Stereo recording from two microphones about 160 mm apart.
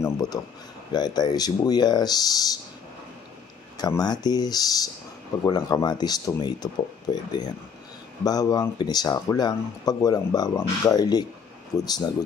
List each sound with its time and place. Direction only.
0.0 s speech: 20° left (ahead or behind)
3.7 s speech: 25° left (ahead or behind)